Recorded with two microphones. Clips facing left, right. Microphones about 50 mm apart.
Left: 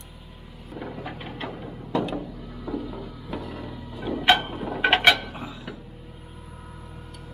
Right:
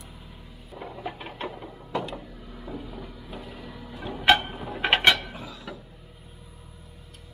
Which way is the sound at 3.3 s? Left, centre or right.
Centre.